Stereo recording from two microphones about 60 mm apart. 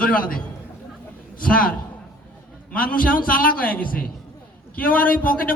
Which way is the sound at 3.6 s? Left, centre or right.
Left.